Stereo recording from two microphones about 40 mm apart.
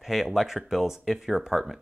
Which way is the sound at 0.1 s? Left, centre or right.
Centre.